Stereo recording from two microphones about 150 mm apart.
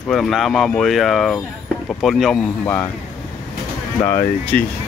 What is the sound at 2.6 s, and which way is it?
Speech, 15° left (ahead or behind).